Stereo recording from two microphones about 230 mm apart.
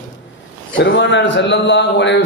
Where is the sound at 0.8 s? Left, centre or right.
Left.